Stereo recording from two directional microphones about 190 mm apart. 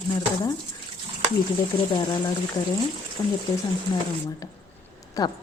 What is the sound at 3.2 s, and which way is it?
Speech, 20° left (ahead or behind).